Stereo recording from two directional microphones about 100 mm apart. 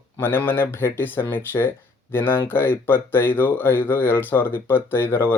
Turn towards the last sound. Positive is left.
turn(degrees=25)  # may be behind; listen again after turning